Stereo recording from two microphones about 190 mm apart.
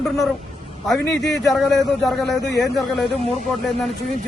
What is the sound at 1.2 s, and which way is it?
Speech, 65° left (ahead or behind).